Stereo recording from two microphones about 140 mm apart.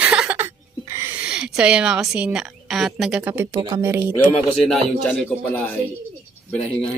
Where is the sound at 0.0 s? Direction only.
10° right (ahead or behind).